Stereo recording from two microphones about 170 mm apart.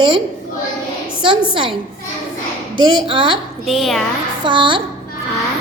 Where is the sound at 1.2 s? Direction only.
30° right (ahead or behind).